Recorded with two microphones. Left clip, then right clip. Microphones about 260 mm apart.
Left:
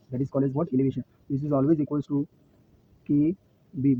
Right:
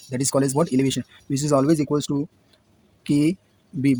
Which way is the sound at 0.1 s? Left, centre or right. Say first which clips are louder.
Right 6 dB; right.